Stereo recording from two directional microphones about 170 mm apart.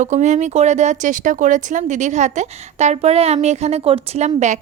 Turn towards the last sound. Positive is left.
turn(degrees=-40)  # may be behind; listen again after turning